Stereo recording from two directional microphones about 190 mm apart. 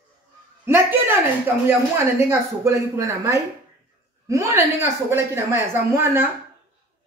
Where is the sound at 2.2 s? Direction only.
15° right (ahead or behind).